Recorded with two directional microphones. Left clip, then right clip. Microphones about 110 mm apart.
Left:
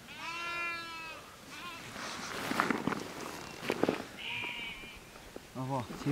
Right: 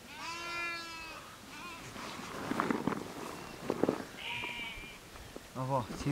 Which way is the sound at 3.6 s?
45° left (ahead or behind).